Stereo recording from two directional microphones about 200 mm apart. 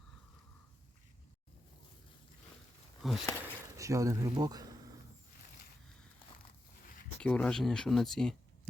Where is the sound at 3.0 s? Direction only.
Centre (ahead or behind).